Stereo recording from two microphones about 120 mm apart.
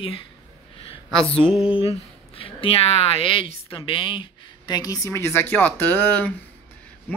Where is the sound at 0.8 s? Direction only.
50° left (ahead or behind).